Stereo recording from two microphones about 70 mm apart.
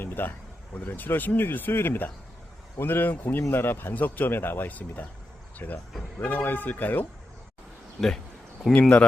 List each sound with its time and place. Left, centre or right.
0.0 s speech: left
8.8 s speech: centre